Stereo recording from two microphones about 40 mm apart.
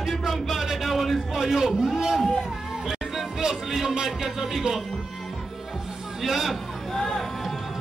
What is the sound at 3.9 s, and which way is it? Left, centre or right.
Speech, centre.